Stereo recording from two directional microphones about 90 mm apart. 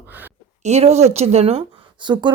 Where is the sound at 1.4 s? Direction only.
90° right.